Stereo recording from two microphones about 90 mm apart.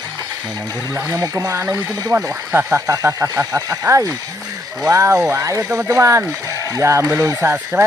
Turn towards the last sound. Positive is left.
turn(degrees=-20)  # may be behind; listen again after turning